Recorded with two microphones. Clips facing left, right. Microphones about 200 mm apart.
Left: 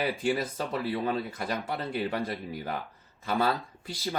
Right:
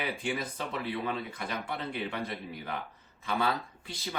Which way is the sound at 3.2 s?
40° left (ahead or behind).